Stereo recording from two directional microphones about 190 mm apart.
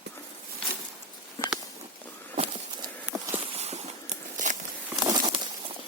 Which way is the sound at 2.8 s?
15° right (ahead or behind).